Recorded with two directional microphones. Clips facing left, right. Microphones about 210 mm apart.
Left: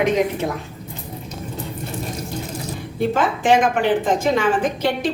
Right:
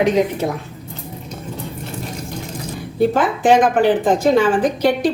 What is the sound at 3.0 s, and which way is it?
A woman's voice, 40° right (ahead or behind).